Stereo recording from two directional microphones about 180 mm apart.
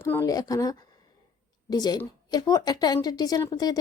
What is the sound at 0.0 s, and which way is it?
Speech, 15° left (ahead or behind).